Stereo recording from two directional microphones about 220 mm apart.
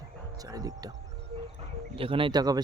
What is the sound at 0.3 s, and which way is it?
Speech, 15° right (ahead or behind).